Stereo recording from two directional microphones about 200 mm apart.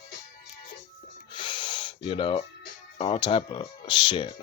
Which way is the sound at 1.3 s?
25° left (ahead or behind).